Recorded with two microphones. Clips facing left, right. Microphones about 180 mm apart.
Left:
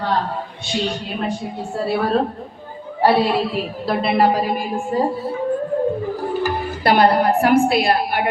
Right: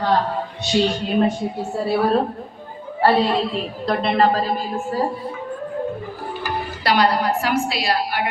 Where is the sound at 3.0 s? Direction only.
10° left (ahead or behind).